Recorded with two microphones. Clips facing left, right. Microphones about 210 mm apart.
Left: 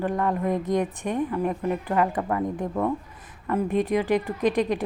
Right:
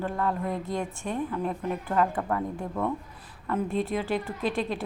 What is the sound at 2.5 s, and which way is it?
A woman's voice, 20° left (ahead or behind).